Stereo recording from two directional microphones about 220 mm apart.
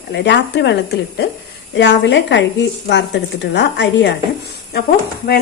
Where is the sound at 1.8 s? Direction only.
55° left (ahead or behind).